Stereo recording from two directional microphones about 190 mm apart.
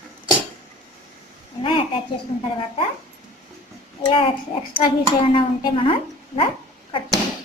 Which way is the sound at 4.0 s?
25° left (ahead or behind).